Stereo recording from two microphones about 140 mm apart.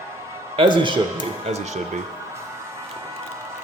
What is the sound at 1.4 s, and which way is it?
Speech, 50° right (ahead or behind).